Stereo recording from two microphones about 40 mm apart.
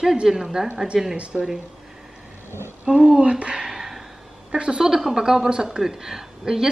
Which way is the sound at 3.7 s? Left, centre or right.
Centre.